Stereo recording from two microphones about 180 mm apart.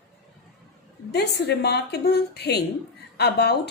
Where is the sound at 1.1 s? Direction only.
65° left (ahead or behind).